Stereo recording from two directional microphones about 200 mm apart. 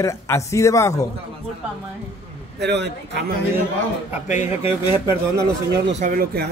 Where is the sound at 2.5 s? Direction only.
60° right (ahead or behind).